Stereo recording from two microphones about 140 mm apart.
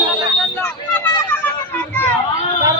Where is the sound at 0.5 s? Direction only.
10° left (ahead or behind).